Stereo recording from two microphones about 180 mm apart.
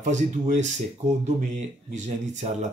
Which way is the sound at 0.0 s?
40° right (ahead or behind).